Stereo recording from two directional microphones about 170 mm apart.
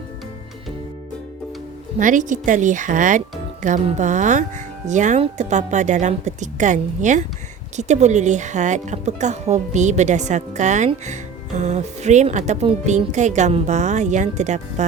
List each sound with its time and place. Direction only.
2.0 s speech: 50° right (ahead or behind)